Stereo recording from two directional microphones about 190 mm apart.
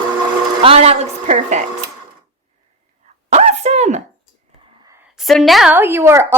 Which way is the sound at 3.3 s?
35° right (ahead or behind).